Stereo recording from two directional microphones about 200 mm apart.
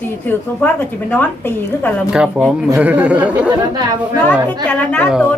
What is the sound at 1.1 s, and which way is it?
Speech, 10° left (ahead or behind).